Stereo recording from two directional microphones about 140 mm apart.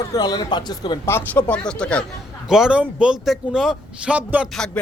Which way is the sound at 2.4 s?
5° right (ahead or behind).